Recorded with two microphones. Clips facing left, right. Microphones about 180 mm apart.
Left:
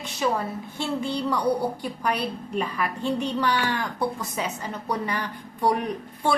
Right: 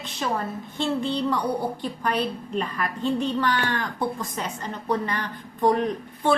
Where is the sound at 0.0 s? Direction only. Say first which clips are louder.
Left 2 dB; 10° left (ahead or behind).